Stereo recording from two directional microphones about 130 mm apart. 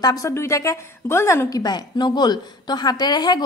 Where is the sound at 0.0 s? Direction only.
25° left (ahead or behind).